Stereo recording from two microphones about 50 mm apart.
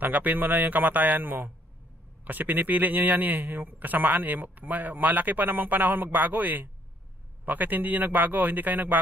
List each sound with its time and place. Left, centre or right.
0.0 s a man's voice: right